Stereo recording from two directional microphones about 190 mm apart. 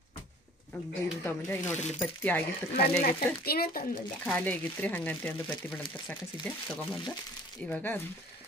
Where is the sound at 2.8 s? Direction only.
50° left (ahead or behind).